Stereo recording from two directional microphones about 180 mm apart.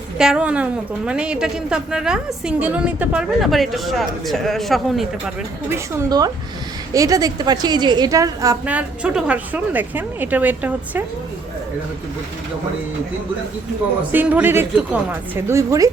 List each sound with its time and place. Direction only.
0.2 s a woman's voice: 5° right (ahead or behind)
5.7 s a woman's voice: 20° right (ahead or behind)
8.6 s a woman's voice: 5° right (ahead or behind)
14.1 s a woman's voice: 10° right (ahead or behind)